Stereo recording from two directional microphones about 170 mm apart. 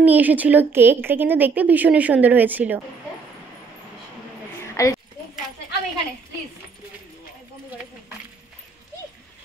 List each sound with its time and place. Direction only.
0.0 s a woman's voice: 10° right (ahead or behind)
4.8 s speech: 15° left (ahead or behind)